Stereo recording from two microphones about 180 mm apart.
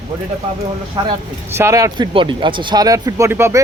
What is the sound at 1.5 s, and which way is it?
Speech, 15° right (ahead or behind).